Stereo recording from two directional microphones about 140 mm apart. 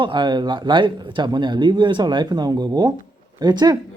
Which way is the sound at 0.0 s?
35° right (ahead or behind).